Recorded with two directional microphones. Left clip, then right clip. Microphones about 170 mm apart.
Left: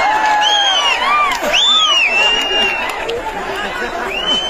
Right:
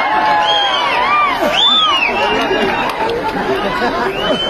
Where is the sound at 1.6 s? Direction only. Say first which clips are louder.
Even; 15° left (ahead or behind).